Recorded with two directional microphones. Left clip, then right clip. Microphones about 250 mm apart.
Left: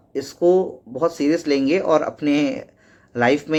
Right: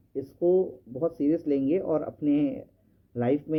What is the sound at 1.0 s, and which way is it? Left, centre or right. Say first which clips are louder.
Speech: left 7 dB; centre.